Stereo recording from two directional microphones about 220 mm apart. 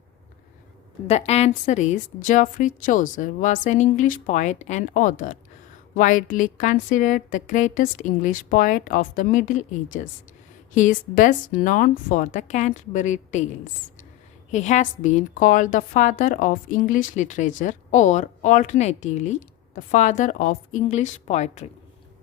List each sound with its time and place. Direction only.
1.0 s a woman's voice: 30° left (ahead or behind)
14.5 s a woman's voice: 35° left (ahead or behind)